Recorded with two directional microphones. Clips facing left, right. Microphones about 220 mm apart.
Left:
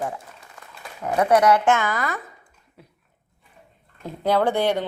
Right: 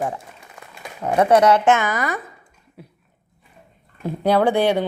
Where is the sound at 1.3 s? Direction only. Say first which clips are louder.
Right 1 dB; 25° right (ahead or behind).